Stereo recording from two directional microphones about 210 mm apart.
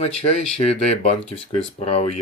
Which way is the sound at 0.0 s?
30° left (ahead or behind).